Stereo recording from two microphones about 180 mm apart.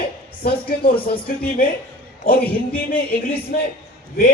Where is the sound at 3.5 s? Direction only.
65° left (ahead or behind).